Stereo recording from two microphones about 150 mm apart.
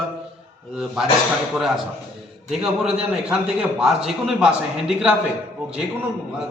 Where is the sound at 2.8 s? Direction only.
5° right (ahead or behind).